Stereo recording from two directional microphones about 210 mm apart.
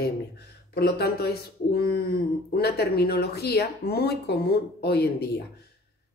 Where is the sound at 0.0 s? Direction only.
50° left (ahead or behind).